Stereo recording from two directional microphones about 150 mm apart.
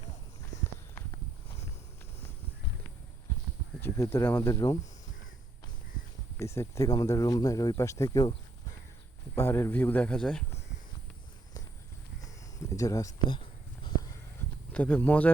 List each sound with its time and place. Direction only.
3.8 s speech: 15° left (ahead or behind)
6.3 s speech: 20° left (ahead or behind)
9.3 s speech: 15° left (ahead or behind)
12.2 s a sound: 20° left (ahead or behind)
13.1 s a sound: 30° left (ahead or behind)
14.7 s speech: 10° left (ahead or behind)